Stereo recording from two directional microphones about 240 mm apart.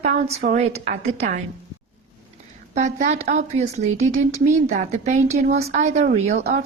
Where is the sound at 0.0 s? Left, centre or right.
Right.